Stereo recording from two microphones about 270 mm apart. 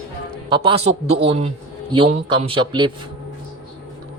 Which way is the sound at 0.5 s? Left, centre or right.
Centre.